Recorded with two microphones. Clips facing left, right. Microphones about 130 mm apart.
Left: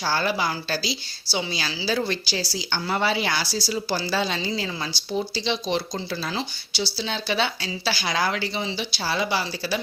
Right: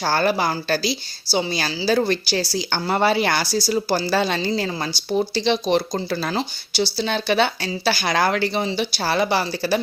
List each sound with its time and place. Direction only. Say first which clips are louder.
0.0 s a woman's voice: right 5 dB; 50° right (ahead or behind)